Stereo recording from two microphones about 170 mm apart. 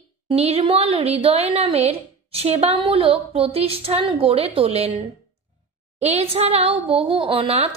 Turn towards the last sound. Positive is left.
turn(degrees=-35)  # may be behind; listen again after turning